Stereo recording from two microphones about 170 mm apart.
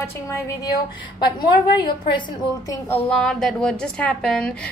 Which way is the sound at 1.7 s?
25° left (ahead or behind).